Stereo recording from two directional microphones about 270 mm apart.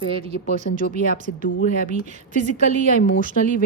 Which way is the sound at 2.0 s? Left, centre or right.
Right.